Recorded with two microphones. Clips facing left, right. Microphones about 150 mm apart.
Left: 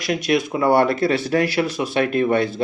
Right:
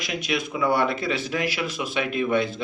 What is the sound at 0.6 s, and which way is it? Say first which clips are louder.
Speech: left 3 dB; 55° left (ahead or behind).